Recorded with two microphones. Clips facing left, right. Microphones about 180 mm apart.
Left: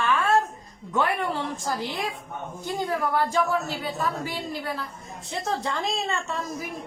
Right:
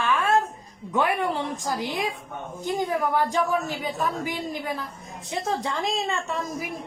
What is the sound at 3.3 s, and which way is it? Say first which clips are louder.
A woman's voice: even; 15° right (ahead or behind).